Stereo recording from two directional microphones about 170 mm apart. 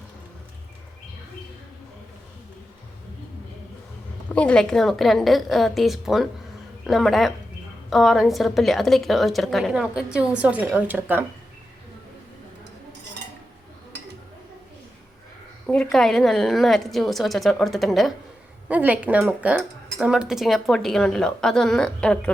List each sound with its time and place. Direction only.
4.4 s speech: 5° left (ahead or behind); by 11.3 s 10° right (ahead or behind)
15.6 s speech: 5° left (ahead or behind)